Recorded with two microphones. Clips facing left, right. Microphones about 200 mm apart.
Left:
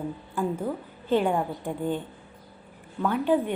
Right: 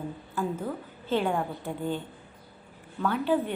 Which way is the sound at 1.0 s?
15° left (ahead or behind).